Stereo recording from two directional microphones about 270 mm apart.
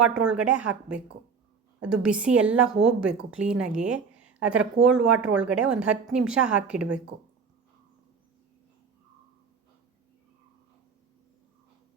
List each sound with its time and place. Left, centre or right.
0.0 s speech: centre